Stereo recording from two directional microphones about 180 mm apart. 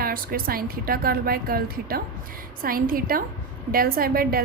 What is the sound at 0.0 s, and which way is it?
A woman's voice, 55° right (ahead or behind).